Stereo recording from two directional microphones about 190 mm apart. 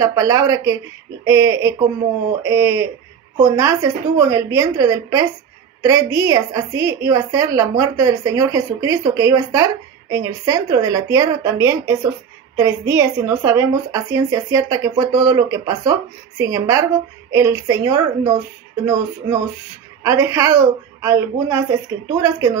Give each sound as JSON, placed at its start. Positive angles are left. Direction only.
{"t": 0.0, "sound": "speech", "side_deg": -15}
{"t": 20.0, "sound": "speech", "side_deg": -15}